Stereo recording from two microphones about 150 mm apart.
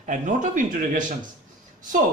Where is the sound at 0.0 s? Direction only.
60° right (ahead or behind).